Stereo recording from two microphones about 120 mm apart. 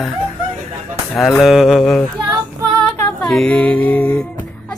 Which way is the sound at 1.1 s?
5° left (ahead or behind).